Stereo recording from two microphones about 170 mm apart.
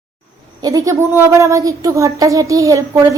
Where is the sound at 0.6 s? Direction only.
20° right (ahead or behind).